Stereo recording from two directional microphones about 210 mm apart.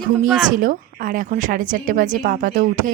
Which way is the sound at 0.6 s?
40° right (ahead or behind).